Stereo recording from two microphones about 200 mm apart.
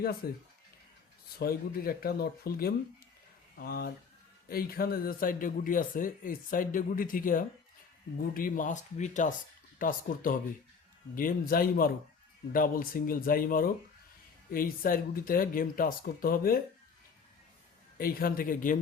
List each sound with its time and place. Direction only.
0.2 s speech: 50° left (ahead or behind)
17.9 s speech: 50° left (ahead or behind)